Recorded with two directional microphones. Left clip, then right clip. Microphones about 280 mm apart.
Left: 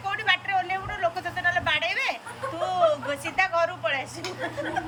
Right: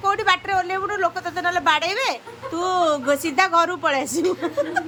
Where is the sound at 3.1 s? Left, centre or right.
Right.